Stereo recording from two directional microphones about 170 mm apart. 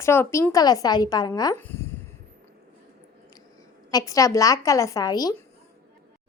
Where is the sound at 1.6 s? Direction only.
15° left (ahead or behind).